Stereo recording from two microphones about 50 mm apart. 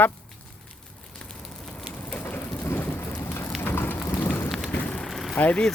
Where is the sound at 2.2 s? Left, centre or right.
Left.